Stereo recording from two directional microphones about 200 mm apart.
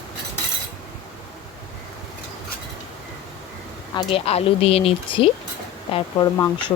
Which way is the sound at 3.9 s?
30° left (ahead or behind).